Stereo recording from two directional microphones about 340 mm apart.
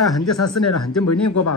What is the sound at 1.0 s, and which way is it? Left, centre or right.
Speech, left.